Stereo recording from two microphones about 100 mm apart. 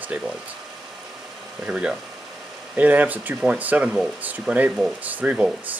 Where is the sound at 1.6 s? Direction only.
10° right (ahead or behind).